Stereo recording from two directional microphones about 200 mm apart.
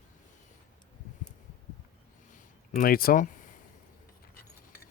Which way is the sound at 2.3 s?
40° left (ahead or behind).